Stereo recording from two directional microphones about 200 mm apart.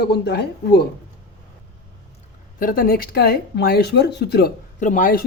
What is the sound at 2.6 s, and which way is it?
Speech, 45° left (ahead or behind).